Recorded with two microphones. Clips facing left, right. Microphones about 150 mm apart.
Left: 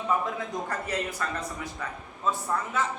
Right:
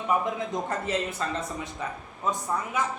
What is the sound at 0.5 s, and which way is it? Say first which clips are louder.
A woman's voice: right 3 dB; 20° right (ahead or behind).